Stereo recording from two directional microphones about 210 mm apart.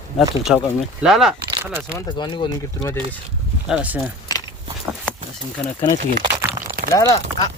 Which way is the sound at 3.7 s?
5° right (ahead or behind).